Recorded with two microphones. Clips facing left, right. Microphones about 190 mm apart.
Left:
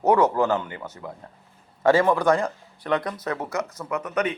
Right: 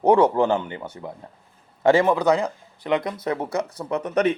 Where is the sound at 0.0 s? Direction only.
30° right (ahead or behind).